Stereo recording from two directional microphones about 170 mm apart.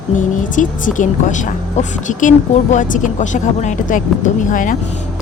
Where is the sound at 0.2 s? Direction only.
50° left (ahead or behind).